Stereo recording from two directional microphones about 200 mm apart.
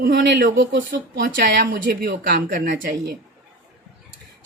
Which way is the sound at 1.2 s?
45° right (ahead or behind).